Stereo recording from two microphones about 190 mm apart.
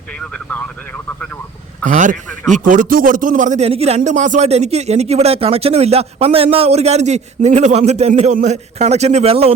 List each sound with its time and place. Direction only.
0.2 s speech: 5° left (ahead or behind)
1.8 s a man's voice: 40° right (ahead or behind)